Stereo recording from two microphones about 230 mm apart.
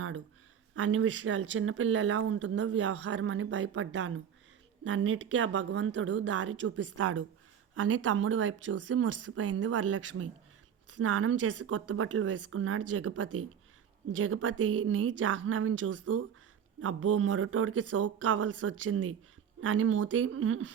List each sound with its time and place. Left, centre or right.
0.8 s speech: right
6.8 s a woman's voice: right
7.8 s speech: right